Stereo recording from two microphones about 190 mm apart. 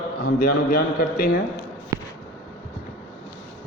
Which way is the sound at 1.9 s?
20° right (ahead or behind).